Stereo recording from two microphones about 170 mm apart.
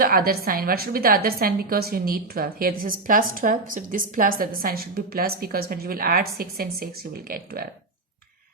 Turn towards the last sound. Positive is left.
turn(degrees=-65)  # may be behind; listen again after turning